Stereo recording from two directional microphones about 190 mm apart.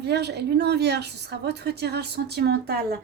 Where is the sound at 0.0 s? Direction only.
60° right (ahead or behind).